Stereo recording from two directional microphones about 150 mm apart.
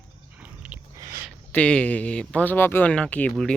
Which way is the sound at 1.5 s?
10° left (ahead or behind).